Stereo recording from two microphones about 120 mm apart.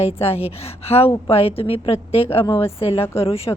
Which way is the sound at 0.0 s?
55° left (ahead or behind).